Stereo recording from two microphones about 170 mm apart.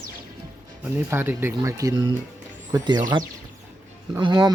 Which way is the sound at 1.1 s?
10° right (ahead or behind).